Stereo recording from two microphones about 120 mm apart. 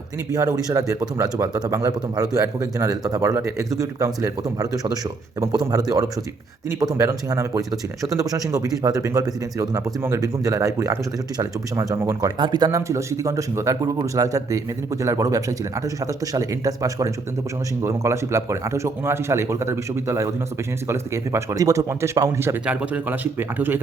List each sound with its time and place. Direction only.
0.3 s speech: 30° right (ahead or behind)
6.7 s speech: 30° right (ahead or behind)
22.6 s speech: 10° right (ahead or behind)